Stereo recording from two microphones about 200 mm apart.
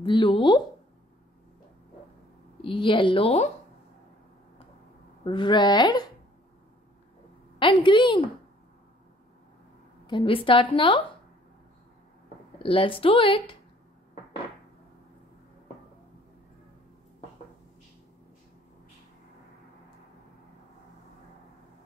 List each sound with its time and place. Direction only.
0.0 s a woman's voice: 25° left (ahead or behind)
2.6 s a woman's voice: 25° left (ahead or behind)
5.2 s a woman's voice: 25° left (ahead or behind)
7.5 s a woman's voice: 25° left (ahead or behind)
10.0 s a woman's voice: 25° left (ahead or behind)
12.6 s a woman's voice: 25° left (ahead or behind)